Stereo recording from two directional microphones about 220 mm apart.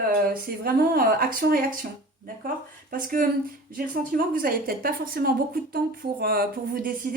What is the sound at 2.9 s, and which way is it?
A woman's voice, 40° right (ahead or behind).